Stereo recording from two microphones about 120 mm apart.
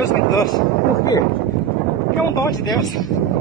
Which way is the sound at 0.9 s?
30° left (ahead or behind).